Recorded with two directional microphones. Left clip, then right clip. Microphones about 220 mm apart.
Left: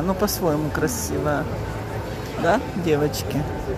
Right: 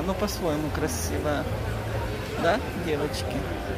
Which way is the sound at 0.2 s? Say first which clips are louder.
Left 5 dB; 10° left (ahead or behind).